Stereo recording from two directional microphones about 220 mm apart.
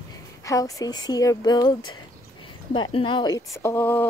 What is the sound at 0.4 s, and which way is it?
Speech, 15° left (ahead or behind).